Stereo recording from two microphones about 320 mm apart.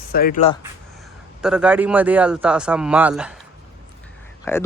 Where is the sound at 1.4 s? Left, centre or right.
Centre.